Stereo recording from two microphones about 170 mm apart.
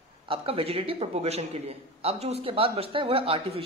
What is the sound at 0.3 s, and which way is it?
A man's voice, 35° right (ahead or behind).